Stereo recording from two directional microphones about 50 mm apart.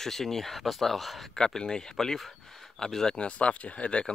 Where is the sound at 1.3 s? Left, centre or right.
Centre.